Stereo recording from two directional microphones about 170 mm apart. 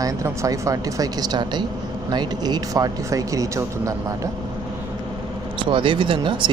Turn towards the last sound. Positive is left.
turn(degrees=-30)  # may be behind; listen again after turning